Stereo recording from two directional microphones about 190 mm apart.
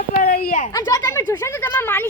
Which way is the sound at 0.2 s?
50° left (ahead or behind).